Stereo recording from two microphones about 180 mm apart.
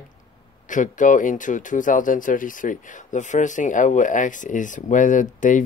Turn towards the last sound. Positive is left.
turn(degrees=45)  # may be behind; listen again after turning